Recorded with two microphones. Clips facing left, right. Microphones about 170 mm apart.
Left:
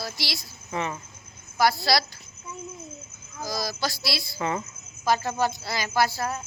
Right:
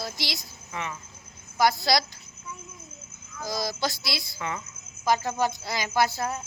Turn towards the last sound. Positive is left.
turn(degrees=-20)  # may be behind; listen again after turning